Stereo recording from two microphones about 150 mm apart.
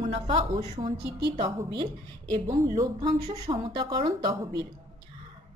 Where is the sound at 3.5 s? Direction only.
35° right (ahead or behind).